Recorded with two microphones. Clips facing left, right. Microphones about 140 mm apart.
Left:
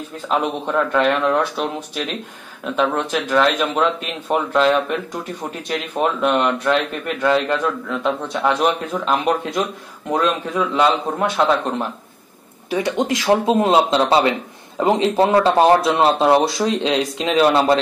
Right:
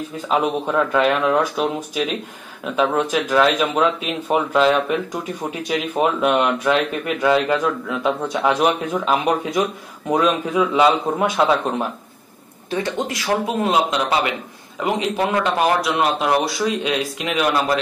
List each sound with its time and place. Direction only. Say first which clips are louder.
0.3 s speech: right 1 dB; 5° right (ahead or behind)
12.6 s speech: left 3 dB; 15° left (ahead or behind)